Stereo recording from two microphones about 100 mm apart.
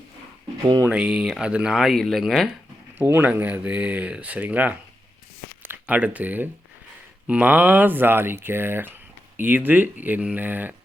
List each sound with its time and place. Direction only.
0.9 s speech: 10° right (ahead or behind)
3.0 s speech: 20° right (ahead or behind)